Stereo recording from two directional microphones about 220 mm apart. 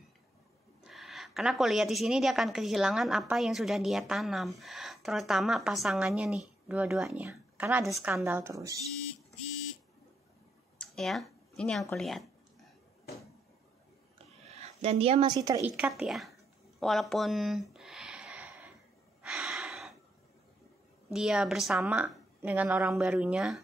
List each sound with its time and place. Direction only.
0.8 s a woman's voice: centre (ahead or behind)
10.8 s a sound: centre (ahead or behind)
11.9 s a woman's voice: centre (ahead or behind)
14.5 s speech: 30° right (ahead or behind)
15.7 s a woman's voice: 5° right (ahead or behind)
16.8 s a sound: centre (ahead or behind)
19.2 s gasp: 5° right (ahead or behind)
21.1 s a woman's voice: 5° right (ahead or behind)